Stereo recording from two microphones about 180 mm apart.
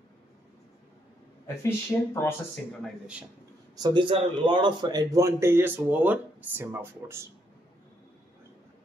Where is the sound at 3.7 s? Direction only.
25° right (ahead or behind).